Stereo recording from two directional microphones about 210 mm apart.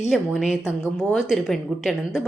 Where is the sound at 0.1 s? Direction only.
Centre (ahead or behind).